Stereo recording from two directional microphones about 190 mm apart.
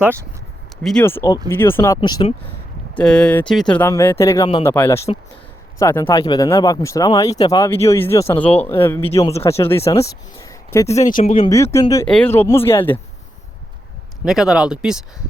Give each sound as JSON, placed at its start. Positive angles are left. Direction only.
{"t": 0.0, "sound": "speech", "side_deg": -10}
{"t": 0.8, "sound": "speech", "side_deg": 5}
{"t": 2.0, "sound": "speech", "side_deg": 25}
{"t": 2.9, "sound": "speech", "side_deg": 5}
{"t": 10.3, "sound": "a sound", "side_deg": 15}
{"t": 11.1, "sound": "speech", "side_deg": 40}
{"t": 11.3, "sound": "speech", "side_deg": 15}
{"t": 14.3, "sound": "speech", "side_deg": 0}